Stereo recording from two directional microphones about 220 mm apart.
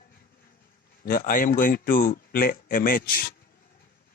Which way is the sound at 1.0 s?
40° left (ahead or behind).